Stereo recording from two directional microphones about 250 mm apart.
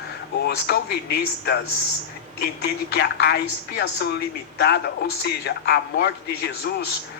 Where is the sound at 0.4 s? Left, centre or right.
Left.